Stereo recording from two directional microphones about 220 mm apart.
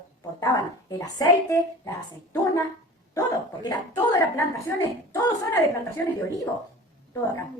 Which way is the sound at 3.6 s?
15° left (ahead or behind).